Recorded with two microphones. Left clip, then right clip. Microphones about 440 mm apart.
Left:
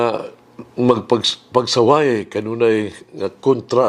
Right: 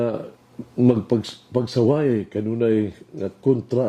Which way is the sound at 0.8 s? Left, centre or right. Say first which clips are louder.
Left 5 dB; left.